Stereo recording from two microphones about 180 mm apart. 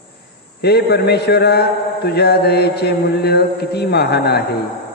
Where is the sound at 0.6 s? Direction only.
65° left (ahead or behind).